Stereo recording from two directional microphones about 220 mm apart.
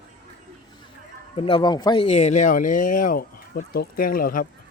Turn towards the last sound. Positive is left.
turn(degrees=40)  # may be behind; listen again after turning